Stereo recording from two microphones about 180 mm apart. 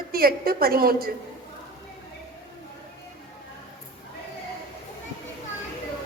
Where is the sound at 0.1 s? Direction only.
55° right (ahead or behind).